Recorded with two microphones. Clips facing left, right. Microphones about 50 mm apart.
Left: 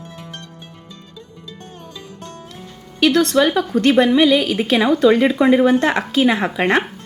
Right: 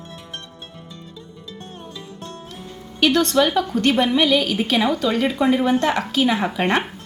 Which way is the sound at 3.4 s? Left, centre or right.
Centre.